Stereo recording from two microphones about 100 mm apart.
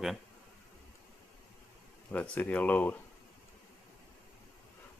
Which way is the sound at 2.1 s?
15° left (ahead or behind).